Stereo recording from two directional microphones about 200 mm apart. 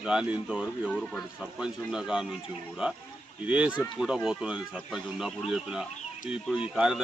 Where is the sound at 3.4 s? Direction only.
5° right (ahead or behind).